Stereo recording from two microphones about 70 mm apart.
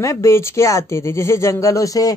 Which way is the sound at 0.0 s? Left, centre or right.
Left.